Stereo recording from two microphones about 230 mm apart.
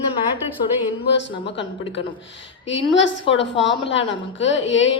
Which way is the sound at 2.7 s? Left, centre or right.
Left.